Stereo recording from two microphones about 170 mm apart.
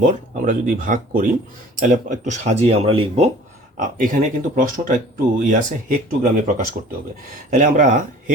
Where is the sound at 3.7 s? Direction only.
50° right (ahead or behind).